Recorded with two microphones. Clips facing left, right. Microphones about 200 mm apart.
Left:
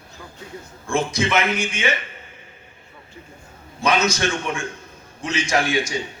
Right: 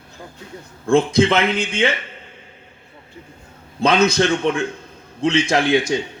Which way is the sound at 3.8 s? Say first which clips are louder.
Right 5 dB; 60° right (ahead or behind).